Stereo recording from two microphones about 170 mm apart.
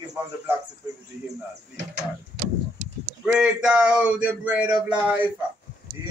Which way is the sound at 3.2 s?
5° right (ahead or behind).